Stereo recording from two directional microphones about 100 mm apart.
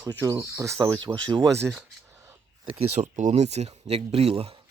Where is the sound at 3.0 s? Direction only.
90° right.